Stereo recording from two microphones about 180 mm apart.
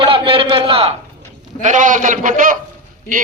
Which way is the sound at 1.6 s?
45° right (ahead or behind).